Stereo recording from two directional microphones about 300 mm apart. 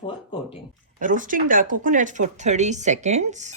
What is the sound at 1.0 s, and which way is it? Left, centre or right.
Speech, right.